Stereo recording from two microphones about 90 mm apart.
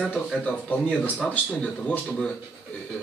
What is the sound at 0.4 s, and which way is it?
Speech, 15° left (ahead or behind).